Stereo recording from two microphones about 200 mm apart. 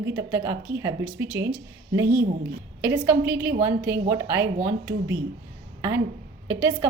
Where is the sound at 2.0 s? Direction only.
50° right (ahead or behind).